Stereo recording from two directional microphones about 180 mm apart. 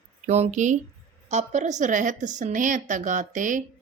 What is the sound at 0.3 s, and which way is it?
Speech, 40° right (ahead or behind).